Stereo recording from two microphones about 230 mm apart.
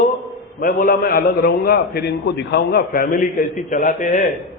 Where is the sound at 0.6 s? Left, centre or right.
Left.